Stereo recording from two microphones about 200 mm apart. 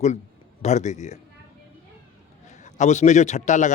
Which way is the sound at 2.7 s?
35° left (ahead or behind).